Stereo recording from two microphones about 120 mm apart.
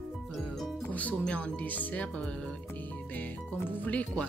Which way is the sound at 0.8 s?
15° left (ahead or behind).